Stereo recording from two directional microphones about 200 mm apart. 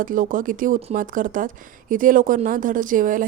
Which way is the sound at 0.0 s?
45° right (ahead or behind).